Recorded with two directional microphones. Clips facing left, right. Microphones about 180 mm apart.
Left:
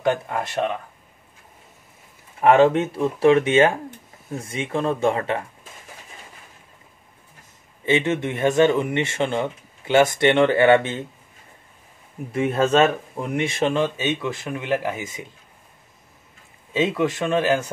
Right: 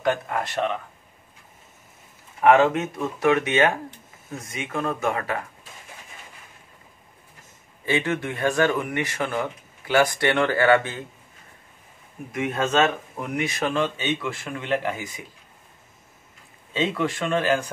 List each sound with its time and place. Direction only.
0.0 s speech: 20° left (ahead or behind)
2.4 s speech: 30° left (ahead or behind)
7.8 s speech: 20° left (ahead or behind)
12.3 s speech: 30° left (ahead or behind)
14.6 s speech: 5° left (ahead or behind)
15.0 s speech: 20° left (ahead or behind)
16.9 s speech: 20° left (ahead or behind)